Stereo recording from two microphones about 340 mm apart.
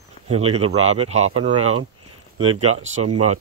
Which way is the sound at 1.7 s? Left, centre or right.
Right.